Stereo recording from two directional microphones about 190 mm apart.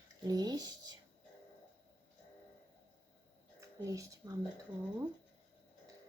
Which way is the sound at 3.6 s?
15° right (ahead or behind).